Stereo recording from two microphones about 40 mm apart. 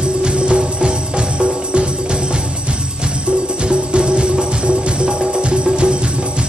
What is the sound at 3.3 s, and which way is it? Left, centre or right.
Music, right.